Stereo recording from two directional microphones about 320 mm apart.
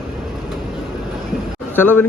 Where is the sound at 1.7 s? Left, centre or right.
Centre.